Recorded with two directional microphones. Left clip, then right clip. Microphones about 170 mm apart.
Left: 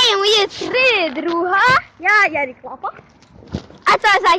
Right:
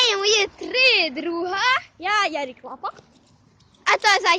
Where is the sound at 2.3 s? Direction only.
45° right (ahead or behind).